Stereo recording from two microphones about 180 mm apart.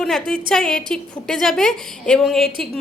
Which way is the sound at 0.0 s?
5° left (ahead or behind).